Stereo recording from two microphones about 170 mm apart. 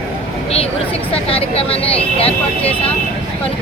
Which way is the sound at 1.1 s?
35° left (ahead or behind).